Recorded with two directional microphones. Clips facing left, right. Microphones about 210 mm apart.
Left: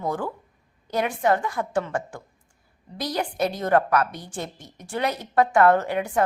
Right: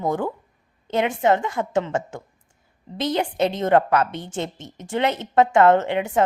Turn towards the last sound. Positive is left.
turn(degrees=-25)  # may be behind; listen again after turning